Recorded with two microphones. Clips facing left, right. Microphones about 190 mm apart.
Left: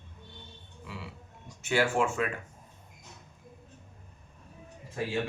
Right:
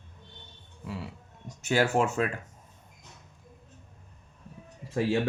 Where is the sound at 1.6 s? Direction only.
40° right (ahead or behind).